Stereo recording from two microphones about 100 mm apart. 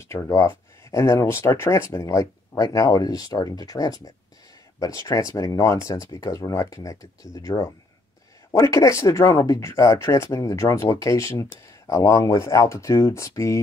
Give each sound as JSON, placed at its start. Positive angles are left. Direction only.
{"t": 0.0, "sound": "speech", "side_deg": 30}